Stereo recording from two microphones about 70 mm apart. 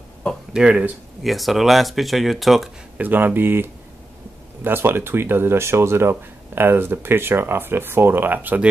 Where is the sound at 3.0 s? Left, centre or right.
Right.